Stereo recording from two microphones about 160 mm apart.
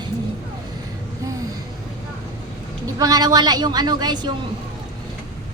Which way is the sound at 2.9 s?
20° right (ahead or behind).